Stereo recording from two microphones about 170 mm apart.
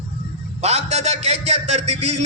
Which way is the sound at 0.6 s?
40° right (ahead or behind).